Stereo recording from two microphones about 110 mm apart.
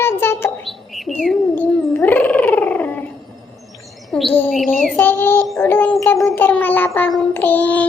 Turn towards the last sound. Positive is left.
turn(degrees=15)  # may be behind; listen again after turning